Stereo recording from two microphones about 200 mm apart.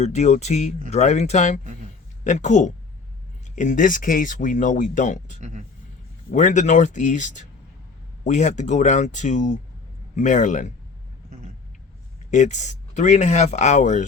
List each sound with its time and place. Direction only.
0.0 s speech: 35° left (ahead or behind)
5.4 s speech: 40° right (ahead or behind)
6.3 s speech: 35° left (ahead or behind)
12.3 s speech: 35° left (ahead or behind)